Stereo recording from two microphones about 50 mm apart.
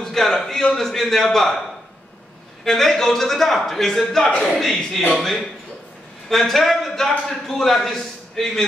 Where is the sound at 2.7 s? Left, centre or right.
Centre.